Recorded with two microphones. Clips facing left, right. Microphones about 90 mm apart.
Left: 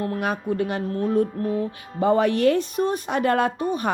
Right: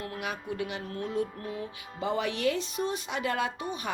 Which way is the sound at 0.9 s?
40° left (ahead or behind).